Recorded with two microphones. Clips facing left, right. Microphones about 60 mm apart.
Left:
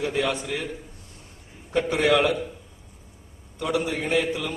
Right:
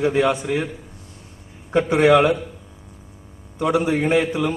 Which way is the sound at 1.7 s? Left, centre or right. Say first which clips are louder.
Right 6 dB; centre.